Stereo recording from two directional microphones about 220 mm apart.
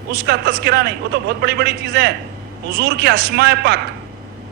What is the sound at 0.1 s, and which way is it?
A man's voice, 45° right (ahead or behind).